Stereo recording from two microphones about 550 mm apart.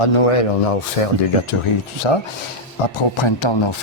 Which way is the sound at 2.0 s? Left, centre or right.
Left.